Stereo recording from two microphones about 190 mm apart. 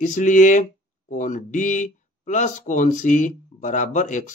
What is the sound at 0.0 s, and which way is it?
Speech, 40° left (ahead or behind).